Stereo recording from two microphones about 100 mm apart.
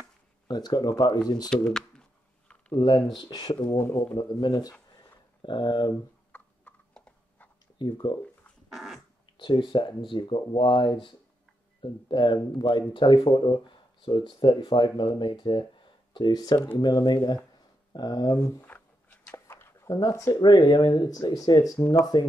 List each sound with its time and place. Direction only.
0.0 s a sound: 45° left (ahead or behind)
1.5 s a sound: 5° left (ahead or behind)
2.7 s speech: 50° left (ahead or behind)
3.7 s speech: 25° left (ahead or behind)
4.1 s speech: 50° left (ahead or behind)
5.4 s speech: 55° left (ahead or behind)
6.3 s horse: 10° left (ahead or behind)
7.8 s speech: 50° left (ahead or behind)
8.7 s fart: 5° right (ahead or behind)
9.4 s speech: 55° left (ahead or behind)
18.5 s a sound: 20° left (ahead or behind)
19.3 s a sound: 25° left (ahead or behind)
19.9 s speech: 35° left (ahead or behind)
20.4 s speech: 50° left (ahead or behind)